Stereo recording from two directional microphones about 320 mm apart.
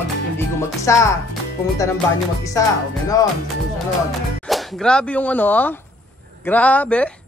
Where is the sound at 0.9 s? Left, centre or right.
Centre.